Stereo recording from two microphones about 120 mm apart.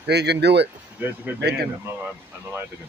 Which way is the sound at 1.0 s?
15° right (ahead or behind).